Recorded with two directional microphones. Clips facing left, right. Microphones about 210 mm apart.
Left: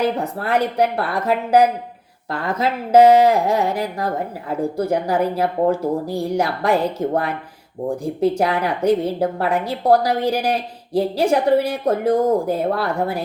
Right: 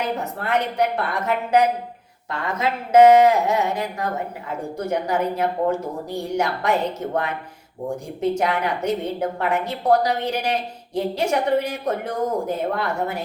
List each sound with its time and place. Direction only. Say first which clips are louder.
0.2 s a woman's voice: left 4 dB; 35° left (ahead or behind)